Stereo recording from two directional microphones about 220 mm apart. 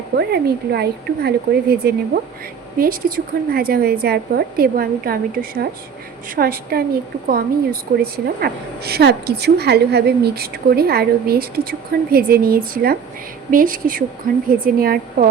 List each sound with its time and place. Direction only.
0.2 s a woman's voice: 45° right (ahead or behind)